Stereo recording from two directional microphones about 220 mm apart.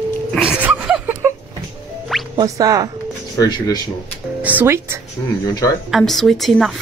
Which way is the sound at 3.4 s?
15° left (ahead or behind).